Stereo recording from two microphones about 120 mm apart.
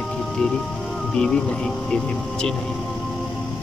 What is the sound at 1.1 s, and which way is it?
Speech, 5° left (ahead or behind).